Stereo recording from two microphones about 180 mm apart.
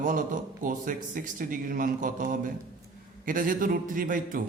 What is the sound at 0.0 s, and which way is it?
A man's voice, 45° right (ahead or behind).